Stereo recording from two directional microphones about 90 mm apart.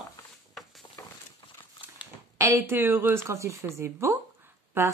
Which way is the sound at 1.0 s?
30° left (ahead or behind).